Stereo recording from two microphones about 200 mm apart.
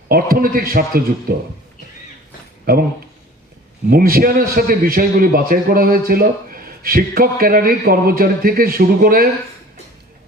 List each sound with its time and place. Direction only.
0.1 s a man's voice: 45° right (ahead or behind)
2.7 s a man's voice: 45° right (ahead or behind)
3.8 s a man's voice: 45° right (ahead or behind)